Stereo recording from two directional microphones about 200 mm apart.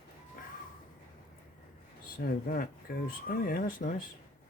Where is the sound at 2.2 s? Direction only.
45° left (ahead or behind).